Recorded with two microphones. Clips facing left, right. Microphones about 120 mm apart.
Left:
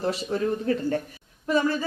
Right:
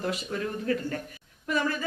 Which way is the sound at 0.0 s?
35° left (ahead or behind).